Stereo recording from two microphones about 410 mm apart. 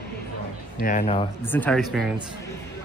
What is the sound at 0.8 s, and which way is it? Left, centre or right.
Speech, centre.